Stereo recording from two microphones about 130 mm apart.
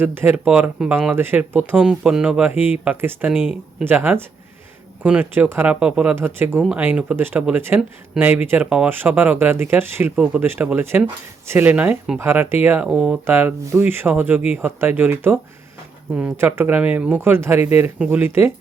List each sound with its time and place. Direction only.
0.0 s speech: 15° right (ahead or behind)